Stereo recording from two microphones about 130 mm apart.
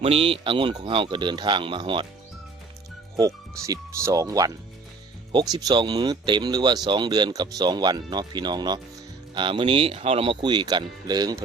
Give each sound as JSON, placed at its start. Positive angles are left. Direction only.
{"t": 0.0, "sound": "speech", "side_deg": -50}
{"t": 3.2, "sound": "speech", "side_deg": -25}